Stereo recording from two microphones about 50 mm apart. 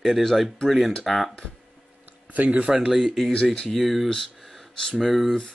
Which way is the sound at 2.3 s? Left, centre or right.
Right.